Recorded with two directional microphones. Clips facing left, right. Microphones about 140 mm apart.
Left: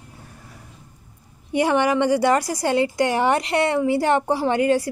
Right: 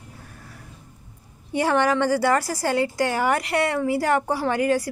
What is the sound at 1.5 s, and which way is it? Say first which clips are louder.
A woman's voice: left 2 dB; 15° left (ahead or behind).